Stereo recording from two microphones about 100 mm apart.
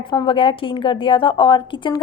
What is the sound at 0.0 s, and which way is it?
A woman's voice, 50° left (ahead or behind).